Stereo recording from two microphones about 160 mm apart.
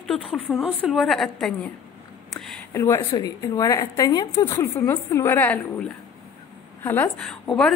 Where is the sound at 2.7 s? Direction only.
15° left (ahead or behind).